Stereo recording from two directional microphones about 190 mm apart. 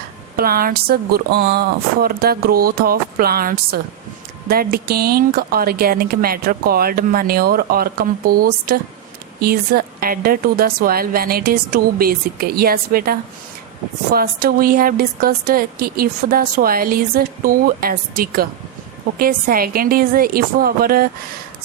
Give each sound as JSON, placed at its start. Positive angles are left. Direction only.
{"t": 0.3, "sound": "speech", "side_deg": -50}